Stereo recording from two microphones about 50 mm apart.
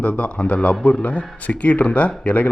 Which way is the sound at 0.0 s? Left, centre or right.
Left.